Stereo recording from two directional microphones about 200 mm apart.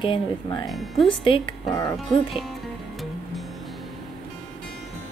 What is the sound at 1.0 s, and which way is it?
Speech, 25° left (ahead or behind).